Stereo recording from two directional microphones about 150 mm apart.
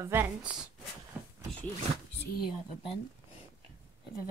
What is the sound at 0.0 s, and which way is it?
Speech, 15° right (ahead or behind).